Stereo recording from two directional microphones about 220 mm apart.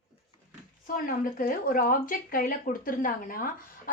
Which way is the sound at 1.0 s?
40° left (ahead or behind).